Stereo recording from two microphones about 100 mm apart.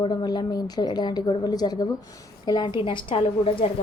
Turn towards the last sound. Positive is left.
turn(degrees=70)  # may be behind; listen again after turning